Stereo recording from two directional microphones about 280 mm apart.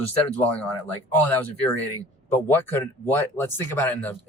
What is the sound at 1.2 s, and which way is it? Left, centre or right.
Speech, centre.